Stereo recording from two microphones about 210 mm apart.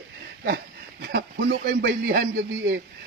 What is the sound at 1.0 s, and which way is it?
Speech, 55° right (ahead or behind).